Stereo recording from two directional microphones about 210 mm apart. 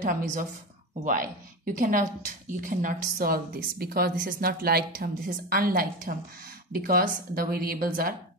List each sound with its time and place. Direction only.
0.0 s a woman's voice: 40° right (ahead or behind)